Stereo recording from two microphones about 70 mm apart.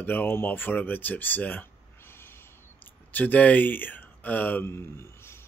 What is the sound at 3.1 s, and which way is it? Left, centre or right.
Speech, left.